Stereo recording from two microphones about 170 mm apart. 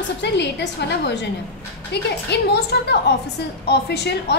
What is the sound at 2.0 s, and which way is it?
A woman's voice, 75° left (ahead or behind).